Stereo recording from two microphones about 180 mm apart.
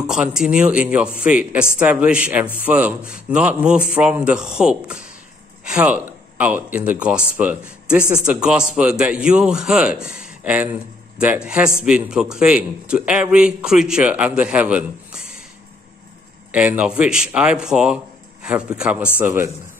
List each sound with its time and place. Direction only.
0.0 s a man's voice: 5° right (ahead or behind)
16.5 s a man's voice: 10° right (ahead or behind)